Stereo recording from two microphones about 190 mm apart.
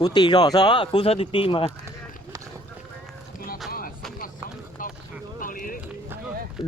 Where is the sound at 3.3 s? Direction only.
50° left (ahead or behind).